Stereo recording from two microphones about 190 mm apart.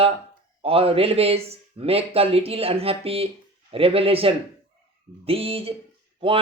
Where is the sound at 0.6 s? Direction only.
30° right (ahead or behind).